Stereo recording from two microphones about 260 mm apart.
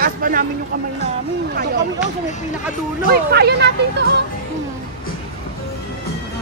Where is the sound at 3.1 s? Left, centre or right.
Right.